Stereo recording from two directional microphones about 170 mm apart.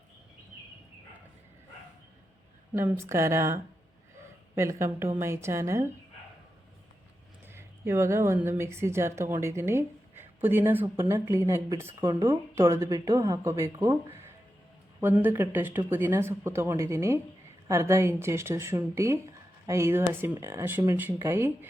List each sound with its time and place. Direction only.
2.7 s speech: 10° right (ahead or behind)
7.4 s speech: 15° right (ahead or behind)
15.0 s speech: 10° right (ahead or behind)